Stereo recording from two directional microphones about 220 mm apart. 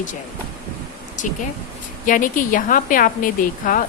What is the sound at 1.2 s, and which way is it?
A woman's voice, 35° left (ahead or behind).